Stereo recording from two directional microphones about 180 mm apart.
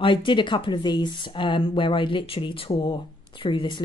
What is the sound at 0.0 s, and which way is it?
Speech, 25° left (ahead or behind).